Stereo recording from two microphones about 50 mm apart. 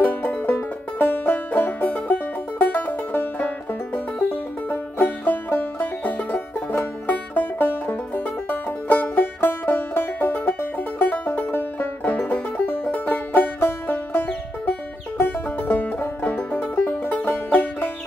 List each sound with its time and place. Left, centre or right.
0.0 s music: left